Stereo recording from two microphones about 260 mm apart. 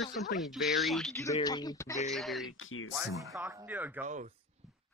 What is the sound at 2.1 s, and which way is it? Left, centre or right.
Speech, centre.